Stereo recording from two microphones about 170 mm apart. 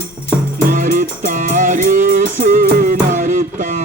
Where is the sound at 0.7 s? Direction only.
50° right (ahead or behind).